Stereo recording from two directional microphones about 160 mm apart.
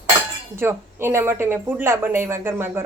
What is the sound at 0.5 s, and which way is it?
A woman's voice, 15° right (ahead or behind).